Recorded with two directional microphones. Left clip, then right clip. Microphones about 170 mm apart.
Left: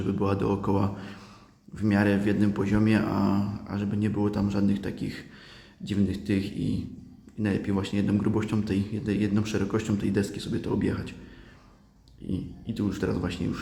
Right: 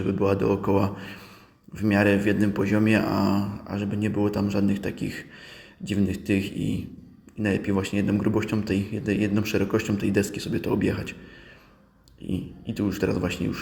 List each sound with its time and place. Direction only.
0.0 s a man's voice: 5° right (ahead or behind)
12.3 s a man's voice: 5° right (ahead or behind)